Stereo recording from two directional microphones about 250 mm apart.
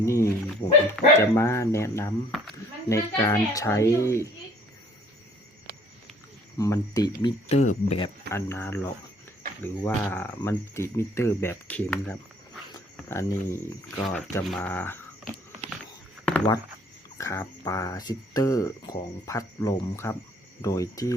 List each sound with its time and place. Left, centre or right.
0.0 s speech: centre
6.6 s speech: centre
8.3 s speech: centre
16.2 s a sound: centre
17.2 s speech: centre